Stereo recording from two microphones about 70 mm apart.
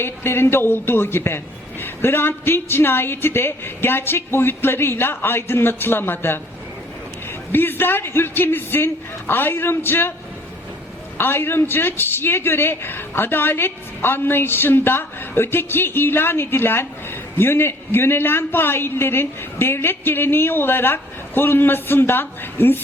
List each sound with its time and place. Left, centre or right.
0.0 s a man's voice: left
7.5 s a man's voice: left
11.2 s a man's voice: left